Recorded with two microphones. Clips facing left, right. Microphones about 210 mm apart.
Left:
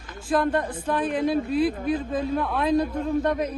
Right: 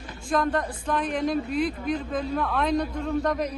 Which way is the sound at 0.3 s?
5° left (ahead or behind).